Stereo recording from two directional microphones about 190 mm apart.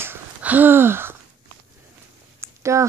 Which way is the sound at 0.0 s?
10° right (ahead or behind).